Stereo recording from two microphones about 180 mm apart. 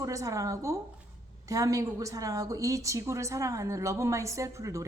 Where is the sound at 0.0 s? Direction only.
20° right (ahead or behind).